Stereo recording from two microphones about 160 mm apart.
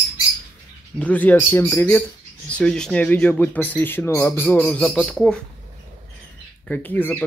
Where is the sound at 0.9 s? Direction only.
10° left (ahead or behind).